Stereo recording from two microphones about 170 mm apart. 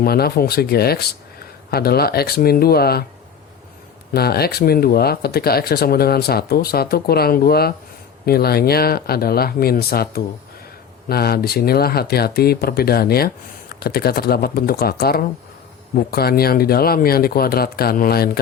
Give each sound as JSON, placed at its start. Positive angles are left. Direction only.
{"t": 0.0, "sound": "speech", "side_deg": 65}
{"t": 4.1, "sound": "speech", "side_deg": 65}